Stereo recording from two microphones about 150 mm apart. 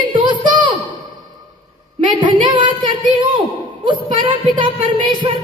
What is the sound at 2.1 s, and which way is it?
A woman's voice, 30° right (ahead or behind).